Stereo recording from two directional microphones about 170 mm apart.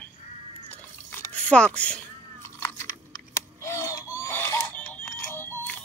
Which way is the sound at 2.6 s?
20° left (ahead or behind).